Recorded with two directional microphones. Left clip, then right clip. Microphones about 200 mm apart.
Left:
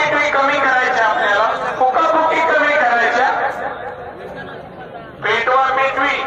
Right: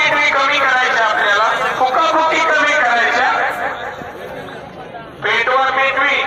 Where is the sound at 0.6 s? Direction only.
10° left (ahead or behind).